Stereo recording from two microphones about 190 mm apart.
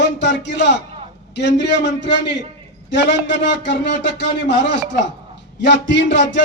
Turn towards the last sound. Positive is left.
turn(degrees=70)  # may be behind; listen again after turning